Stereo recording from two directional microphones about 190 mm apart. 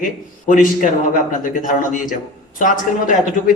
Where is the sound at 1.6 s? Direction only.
45° left (ahead or behind).